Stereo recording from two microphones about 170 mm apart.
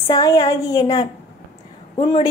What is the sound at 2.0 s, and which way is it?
Speech, 35° left (ahead or behind).